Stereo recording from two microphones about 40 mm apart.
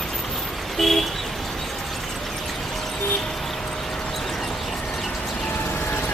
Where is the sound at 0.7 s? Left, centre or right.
Centre.